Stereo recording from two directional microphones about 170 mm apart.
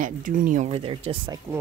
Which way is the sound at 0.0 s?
50° right (ahead or behind).